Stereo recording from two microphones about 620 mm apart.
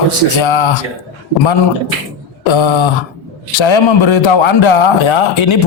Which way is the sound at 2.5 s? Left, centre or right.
Left.